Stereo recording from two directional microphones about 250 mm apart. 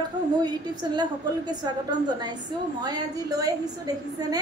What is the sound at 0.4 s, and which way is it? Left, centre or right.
A woman's voice, centre.